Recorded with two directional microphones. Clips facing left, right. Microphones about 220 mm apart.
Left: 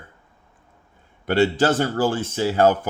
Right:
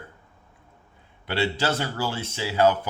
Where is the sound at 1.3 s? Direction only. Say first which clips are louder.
Left 7 dB; 45° left (ahead or behind).